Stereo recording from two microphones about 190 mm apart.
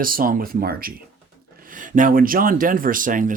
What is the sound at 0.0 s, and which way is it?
Speech, 50° right (ahead or behind).